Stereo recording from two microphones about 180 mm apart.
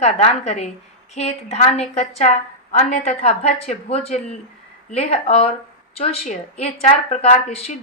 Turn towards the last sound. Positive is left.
turn(degrees=35)  # may be behind; listen again after turning